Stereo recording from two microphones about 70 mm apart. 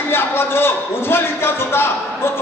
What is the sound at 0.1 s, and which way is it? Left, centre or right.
A woman's voice, left.